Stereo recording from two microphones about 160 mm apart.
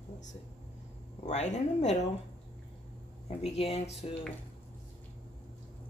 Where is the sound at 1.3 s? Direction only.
45° left (ahead or behind).